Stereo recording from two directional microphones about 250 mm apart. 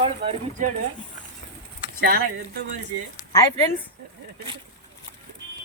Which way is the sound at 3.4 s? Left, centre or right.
Centre.